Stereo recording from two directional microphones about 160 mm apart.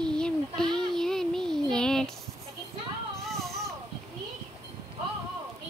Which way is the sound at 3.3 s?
Centre (ahead or behind).